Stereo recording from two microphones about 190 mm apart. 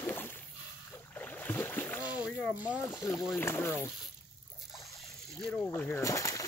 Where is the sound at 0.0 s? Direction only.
10° left (ahead or behind).